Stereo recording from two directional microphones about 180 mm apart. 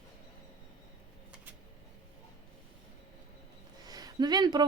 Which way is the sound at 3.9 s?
20° right (ahead or behind).